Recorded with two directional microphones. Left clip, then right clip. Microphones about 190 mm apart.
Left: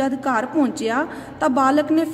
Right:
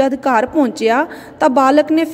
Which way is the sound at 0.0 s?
35° right (ahead or behind).